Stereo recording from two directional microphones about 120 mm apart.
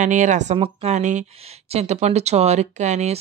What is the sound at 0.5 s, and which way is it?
Speech, 50° right (ahead or behind).